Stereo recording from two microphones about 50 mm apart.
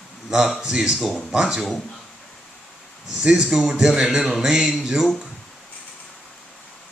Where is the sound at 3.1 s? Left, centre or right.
Centre.